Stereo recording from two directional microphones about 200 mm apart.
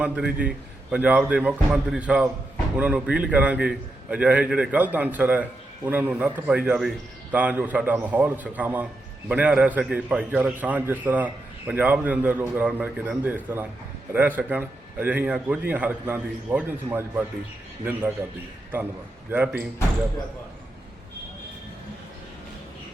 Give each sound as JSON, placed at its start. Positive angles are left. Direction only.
{"t": 0.0, "sound": "a man's voice", "side_deg": -5}
{"t": 19.3, "sound": "a man's voice", "side_deg": -5}